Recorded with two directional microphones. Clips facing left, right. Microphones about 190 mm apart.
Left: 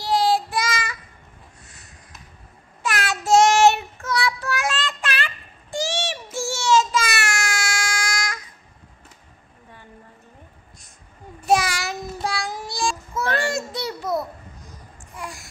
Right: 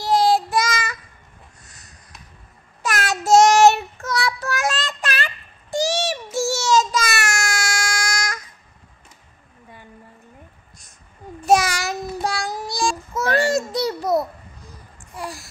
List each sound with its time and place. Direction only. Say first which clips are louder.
0.0 s child singing: right 3 dB; 45° right (ahead or behind)
2.8 s child singing: right 2 dB; 40° right (ahead or behind)
11.4 s child singing: right 3 dB; 45° right (ahead or behind)
15.1 s babbling: right 4 dB; 35° right (ahead or behind)